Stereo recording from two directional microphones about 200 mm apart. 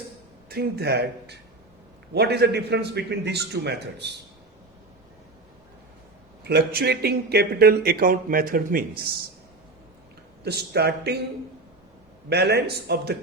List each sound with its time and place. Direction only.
0.4 s a man's voice: 50° right (ahead or behind)
6.5 s speech: 50° right (ahead or behind)
10.4 s speech: 55° right (ahead or behind)
12.3 s speech: 55° right (ahead or behind)